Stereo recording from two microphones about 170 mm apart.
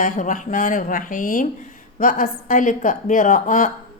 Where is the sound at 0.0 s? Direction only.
50° left (ahead or behind).